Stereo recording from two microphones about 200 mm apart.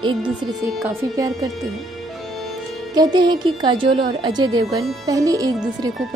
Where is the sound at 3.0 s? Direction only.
20° right (ahead or behind).